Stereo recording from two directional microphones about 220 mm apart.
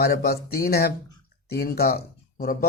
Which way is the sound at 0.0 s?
45° left (ahead or behind).